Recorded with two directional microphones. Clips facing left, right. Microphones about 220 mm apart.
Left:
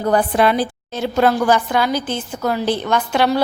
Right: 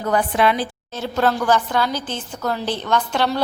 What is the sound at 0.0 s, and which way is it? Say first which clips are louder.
Speech: left 3 dB; 35° left (ahead or behind).